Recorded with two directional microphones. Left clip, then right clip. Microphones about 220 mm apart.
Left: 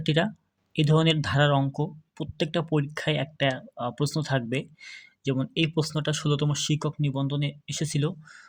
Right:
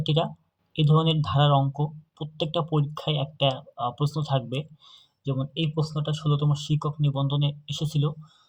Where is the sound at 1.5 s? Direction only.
25° left (ahead or behind).